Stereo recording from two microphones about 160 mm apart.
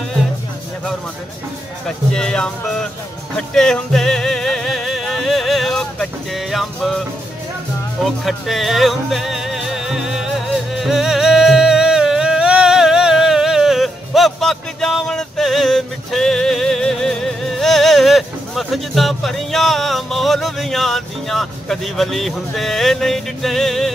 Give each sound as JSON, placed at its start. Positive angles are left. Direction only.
{"t": 1.9, "sound": "speech", "side_deg": 5}
{"t": 3.3, "sound": "music", "side_deg": 5}
{"t": 8.0, "sound": "music", "side_deg": 0}